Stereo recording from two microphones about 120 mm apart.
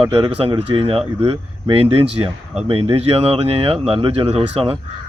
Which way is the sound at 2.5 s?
55° right (ahead or behind).